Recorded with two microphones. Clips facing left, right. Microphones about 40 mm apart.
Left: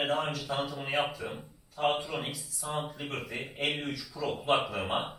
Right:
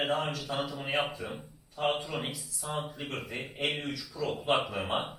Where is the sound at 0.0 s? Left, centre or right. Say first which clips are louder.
Even; centre.